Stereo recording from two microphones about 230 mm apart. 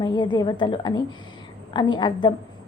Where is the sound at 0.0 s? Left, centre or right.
Centre.